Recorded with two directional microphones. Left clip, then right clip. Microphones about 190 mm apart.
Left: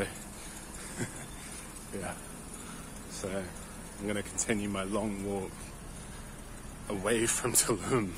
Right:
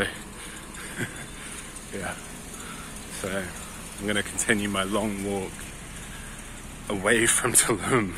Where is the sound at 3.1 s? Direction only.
10° left (ahead or behind).